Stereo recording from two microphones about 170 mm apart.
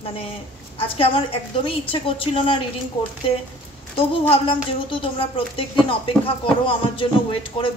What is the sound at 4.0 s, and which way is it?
Speech, 35° left (ahead or behind).